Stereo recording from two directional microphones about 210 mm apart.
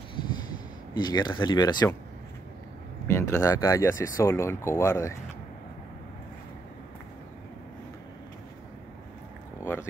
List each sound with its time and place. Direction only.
0.9 s speech: 20° left (ahead or behind)
3.1 s speech: 15° left (ahead or behind)
9.6 s a sound: 10° left (ahead or behind)